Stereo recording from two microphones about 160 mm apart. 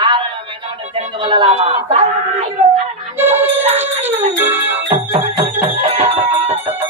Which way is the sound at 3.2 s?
10° right (ahead or behind).